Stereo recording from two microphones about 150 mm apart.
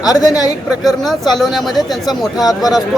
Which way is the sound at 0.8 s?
Centre (ahead or behind).